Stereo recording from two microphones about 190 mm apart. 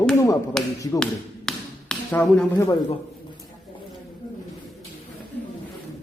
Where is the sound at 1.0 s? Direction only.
5° left (ahead or behind).